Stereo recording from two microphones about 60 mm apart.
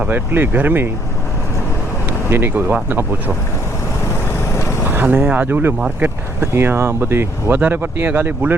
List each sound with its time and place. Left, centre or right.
0.1 s speech: right
2.0 s speech: right
4.9 s vehicle: right
5.3 s speech: right